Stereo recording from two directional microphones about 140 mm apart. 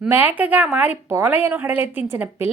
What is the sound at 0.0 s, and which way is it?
A woman's voice, 10° right (ahead or behind).